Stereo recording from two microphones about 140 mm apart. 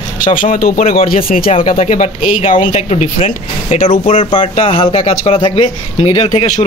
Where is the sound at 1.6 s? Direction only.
60° left (ahead or behind).